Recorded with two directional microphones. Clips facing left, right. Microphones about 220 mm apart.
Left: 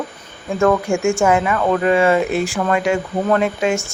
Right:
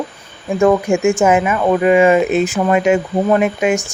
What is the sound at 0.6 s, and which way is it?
Speech, 15° right (ahead or behind).